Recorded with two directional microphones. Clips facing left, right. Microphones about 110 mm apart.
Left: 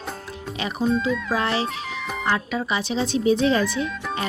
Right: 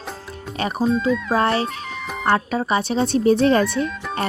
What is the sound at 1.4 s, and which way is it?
A woman's voice, 45° right (ahead or behind).